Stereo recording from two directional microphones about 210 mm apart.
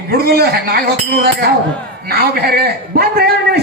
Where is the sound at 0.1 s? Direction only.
50° right (ahead or behind).